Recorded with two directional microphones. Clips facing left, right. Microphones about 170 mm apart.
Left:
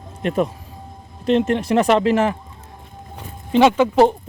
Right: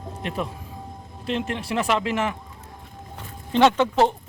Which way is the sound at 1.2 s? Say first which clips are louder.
Left 10 dB; 40° left (ahead or behind).